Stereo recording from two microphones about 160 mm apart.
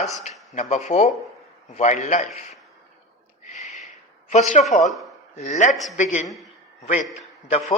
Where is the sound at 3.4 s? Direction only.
50° left (ahead or behind).